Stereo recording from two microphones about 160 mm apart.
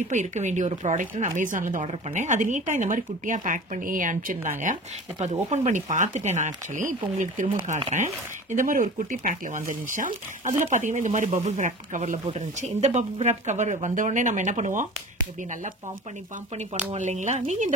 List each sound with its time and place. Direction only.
0.1 s speech: 50° right (ahead or behind)
5.2 s speech: 45° right (ahead or behind)
16.5 s speech: 45° right (ahead or behind)